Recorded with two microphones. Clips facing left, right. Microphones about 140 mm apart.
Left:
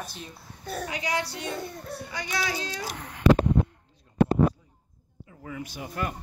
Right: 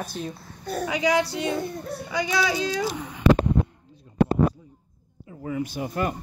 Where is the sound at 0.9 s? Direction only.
90° right.